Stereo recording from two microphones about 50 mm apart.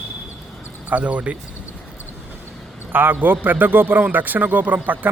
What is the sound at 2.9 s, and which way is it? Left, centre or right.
A man's voice, right.